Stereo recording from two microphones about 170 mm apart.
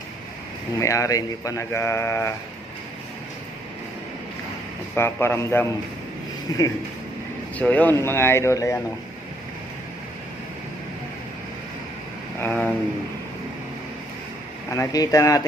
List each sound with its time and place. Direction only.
0.8 s speech: 20° left (ahead or behind)
4.9 s speech: 15° left (ahead or behind)
7.6 s speech: 10° left (ahead or behind)
12.4 s speech: 10° left (ahead or behind)
14.7 s speech: 20° left (ahead or behind)